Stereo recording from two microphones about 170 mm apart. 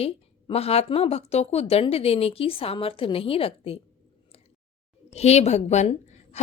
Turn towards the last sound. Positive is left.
turn(degrees=40)  # may be behind; listen again after turning